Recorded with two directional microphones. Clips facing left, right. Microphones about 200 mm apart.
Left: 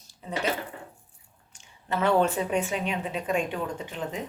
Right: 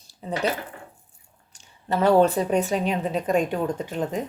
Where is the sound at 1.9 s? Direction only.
35° right (ahead or behind).